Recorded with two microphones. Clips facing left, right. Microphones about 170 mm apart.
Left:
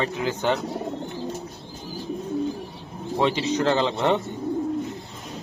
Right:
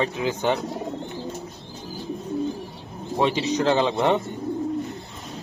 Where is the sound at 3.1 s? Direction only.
20° right (ahead or behind).